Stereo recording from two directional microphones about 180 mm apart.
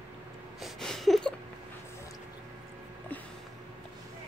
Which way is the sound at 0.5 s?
Centre (ahead or behind).